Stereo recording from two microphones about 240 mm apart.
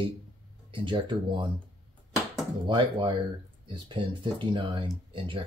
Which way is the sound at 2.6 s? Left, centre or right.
Centre.